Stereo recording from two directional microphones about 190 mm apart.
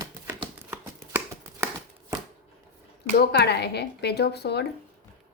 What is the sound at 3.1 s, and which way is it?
Speech, 60° left (ahead or behind).